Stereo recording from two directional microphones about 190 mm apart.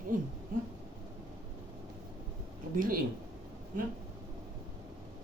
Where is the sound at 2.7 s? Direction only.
45° right (ahead or behind).